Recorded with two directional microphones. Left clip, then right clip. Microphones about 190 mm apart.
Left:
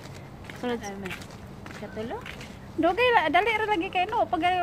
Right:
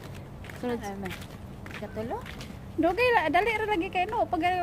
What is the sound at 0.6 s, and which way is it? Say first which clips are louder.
Speech: left 2 dB; centre (ahead or behind).